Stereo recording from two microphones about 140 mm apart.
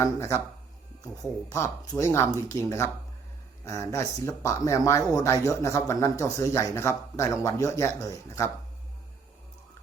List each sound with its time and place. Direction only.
0.0 s speech: 20° left (ahead or behind)
1.5 s speech: 20° left (ahead or behind)